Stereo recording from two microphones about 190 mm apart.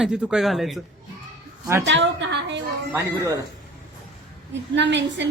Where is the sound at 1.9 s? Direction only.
70° right (ahead or behind).